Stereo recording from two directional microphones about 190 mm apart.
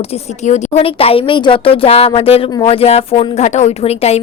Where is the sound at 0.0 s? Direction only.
35° left (ahead or behind).